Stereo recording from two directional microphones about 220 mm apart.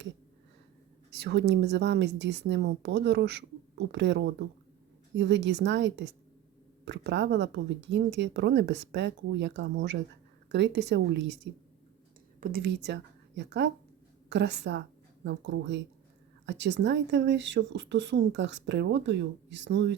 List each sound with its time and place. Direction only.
1.1 s speech: 50° right (ahead or behind)
12.4 s a woman's voice: 45° right (ahead or behind)